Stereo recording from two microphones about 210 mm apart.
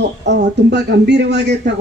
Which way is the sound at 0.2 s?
55° right (ahead or behind).